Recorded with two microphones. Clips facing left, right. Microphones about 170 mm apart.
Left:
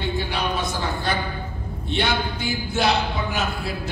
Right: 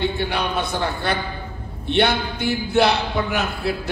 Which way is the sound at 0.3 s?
60° right (ahead or behind).